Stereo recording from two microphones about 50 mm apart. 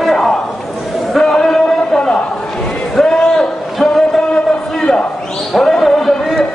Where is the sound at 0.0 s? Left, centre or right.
Centre.